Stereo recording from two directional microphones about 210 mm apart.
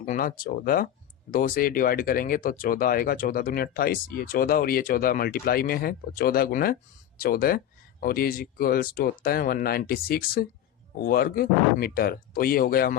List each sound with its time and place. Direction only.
0.0 s speech: 40° left (ahead or behind)